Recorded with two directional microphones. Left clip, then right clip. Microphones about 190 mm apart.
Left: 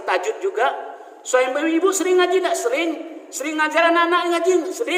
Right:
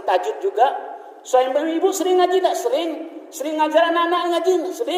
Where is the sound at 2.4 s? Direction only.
45° left (ahead or behind).